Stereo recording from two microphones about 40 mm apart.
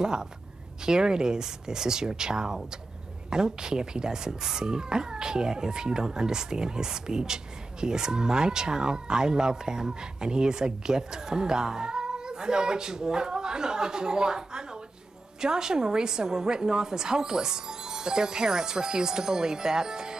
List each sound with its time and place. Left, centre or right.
0.0 s speech: centre